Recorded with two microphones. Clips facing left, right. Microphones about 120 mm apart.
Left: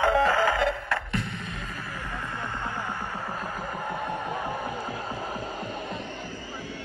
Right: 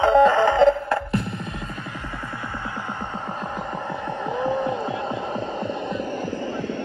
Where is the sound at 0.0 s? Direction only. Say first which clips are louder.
Right 7 dB; 25° right (ahead or behind).